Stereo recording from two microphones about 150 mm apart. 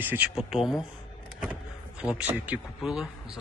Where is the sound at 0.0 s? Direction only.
15° right (ahead or behind).